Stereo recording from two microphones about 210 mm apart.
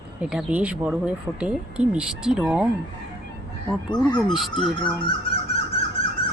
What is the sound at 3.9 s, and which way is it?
Speech, 20° left (ahead or behind).